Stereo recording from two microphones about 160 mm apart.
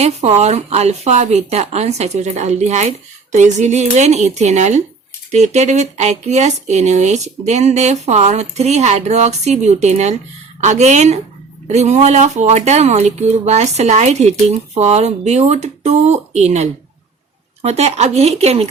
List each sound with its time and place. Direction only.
0.0 s speech: 45° right (ahead or behind)